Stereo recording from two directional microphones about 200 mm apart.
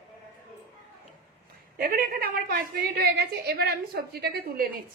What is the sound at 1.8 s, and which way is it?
A woman's voice, 45° right (ahead or behind).